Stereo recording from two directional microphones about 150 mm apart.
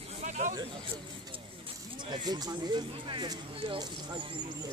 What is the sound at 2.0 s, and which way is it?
Speech, 30° right (ahead or behind).